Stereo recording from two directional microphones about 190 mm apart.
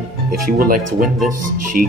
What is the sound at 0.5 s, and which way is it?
Speech, 50° right (ahead or behind).